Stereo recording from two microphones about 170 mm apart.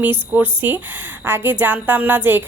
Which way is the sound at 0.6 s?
10° right (ahead or behind).